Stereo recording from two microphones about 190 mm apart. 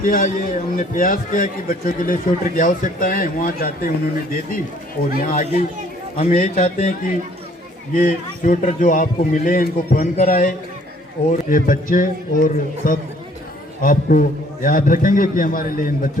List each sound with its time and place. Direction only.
0.0 s a man's voice: 50° left (ahead or behind)
6.1 s a man's voice: 35° left (ahead or behind)
7.9 s a man's voice: 45° left (ahead or behind)